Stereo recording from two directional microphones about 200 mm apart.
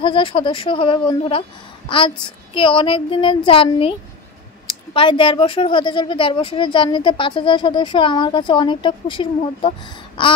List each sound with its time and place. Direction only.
0.0 s speech: 25° left (ahead or behind)
4.9 s speech: 25° left (ahead or behind)